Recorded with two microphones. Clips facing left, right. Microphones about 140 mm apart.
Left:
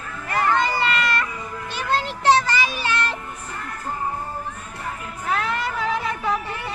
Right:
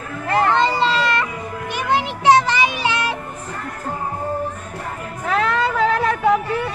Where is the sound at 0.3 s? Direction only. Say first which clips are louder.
Right 4 dB; 25° right (ahead or behind).